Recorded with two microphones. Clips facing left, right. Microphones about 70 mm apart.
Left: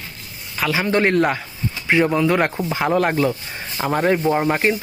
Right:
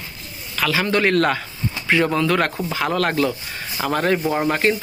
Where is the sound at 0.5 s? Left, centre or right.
Centre.